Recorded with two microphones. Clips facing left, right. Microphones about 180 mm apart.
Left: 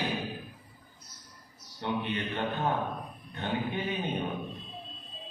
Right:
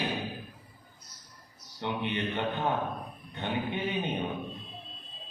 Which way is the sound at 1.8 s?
20° right (ahead or behind).